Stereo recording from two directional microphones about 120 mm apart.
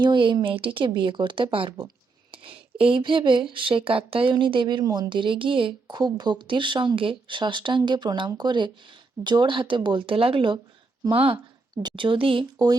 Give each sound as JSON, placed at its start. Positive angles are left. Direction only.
{"t": 0.0, "sound": "speech", "side_deg": -40}
{"t": 11.7, "sound": "speech", "side_deg": -35}